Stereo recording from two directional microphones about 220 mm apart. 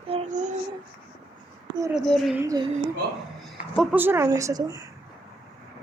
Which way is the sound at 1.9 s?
Centre (ahead or behind).